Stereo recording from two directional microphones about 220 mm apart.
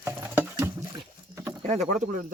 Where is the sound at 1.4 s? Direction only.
10° right (ahead or behind).